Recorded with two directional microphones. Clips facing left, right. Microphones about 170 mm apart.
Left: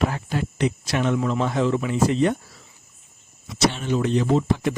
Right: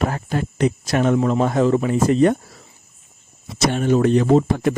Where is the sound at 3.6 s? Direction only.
50° right (ahead or behind).